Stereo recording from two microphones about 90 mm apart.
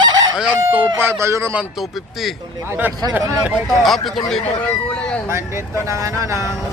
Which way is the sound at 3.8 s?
Centre (ahead or behind).